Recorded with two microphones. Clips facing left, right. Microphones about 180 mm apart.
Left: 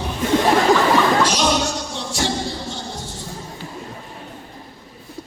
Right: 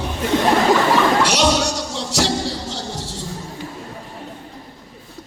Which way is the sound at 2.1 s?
85° right.